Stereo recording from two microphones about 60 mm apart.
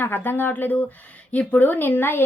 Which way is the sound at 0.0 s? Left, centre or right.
Left.